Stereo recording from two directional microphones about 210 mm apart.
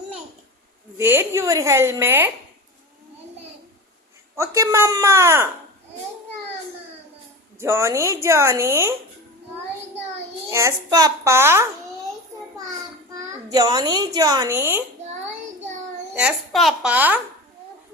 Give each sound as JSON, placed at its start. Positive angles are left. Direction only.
{"t": 0.9, "sound": "a woman's voice", "side_deg": -10}
{"t": 4.4, "sound": "a woman's voice", "side_deg": -15}
{"t": 7.6, "sound": "a woman's voice", "side_deg": -15}
{"t": 10.5, "sound": "a woman's voice", "side_deg": -15}
{"t": 13.5, "sound": "a woman's voice", "side_deg": -20}
{"t": 16.1, "sound": "a woman's voice", "side_deg": -5}